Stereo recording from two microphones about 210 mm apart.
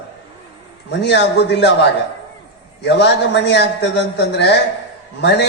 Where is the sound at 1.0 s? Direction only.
55° left (ahead or behind).